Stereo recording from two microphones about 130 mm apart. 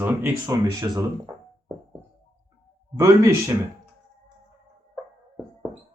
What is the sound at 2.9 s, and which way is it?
Speech, 25° right (ahead or behind).